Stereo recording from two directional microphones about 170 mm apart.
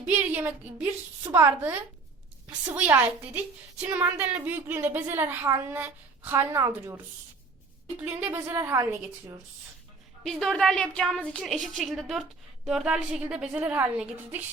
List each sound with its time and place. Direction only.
0.0 s a woman's voice: 15° right (ahead or behind)
10.2 s a woman's voice: 5° left (ahead or behind)